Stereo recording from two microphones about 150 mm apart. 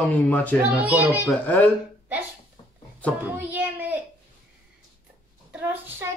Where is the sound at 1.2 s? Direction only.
10° left (ahead or behind).